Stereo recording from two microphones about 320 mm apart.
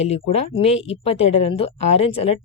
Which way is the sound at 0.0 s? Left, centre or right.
Centre.